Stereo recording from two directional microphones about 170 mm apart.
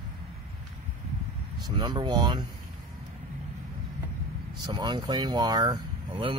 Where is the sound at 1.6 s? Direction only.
25° right (ahead or behind).